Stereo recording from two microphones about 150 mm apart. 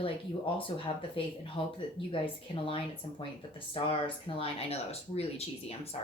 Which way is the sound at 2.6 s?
35° left (ahead or behind).